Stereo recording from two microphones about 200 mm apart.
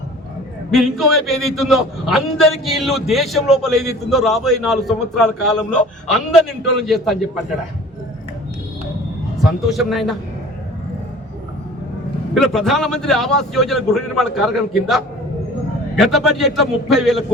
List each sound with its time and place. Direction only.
0.7 s a man's voice: centre (ahead or behind)
9.4 s a man's voice: centre (ahead or behind)
12.3 s a man's voice: centre (ahead or behind)